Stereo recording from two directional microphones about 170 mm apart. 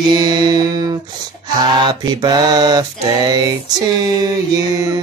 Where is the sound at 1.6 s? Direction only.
25° right (ahead or behind).